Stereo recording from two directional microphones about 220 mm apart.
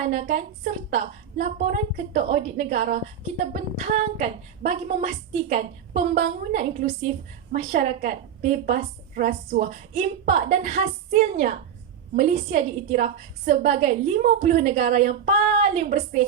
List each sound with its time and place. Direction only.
0.1 s a woman's voice: 35° right (ahead or behind)